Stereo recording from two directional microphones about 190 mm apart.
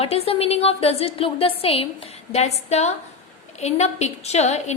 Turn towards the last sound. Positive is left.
turn(degrees=35)  # may be behind; listen again after turning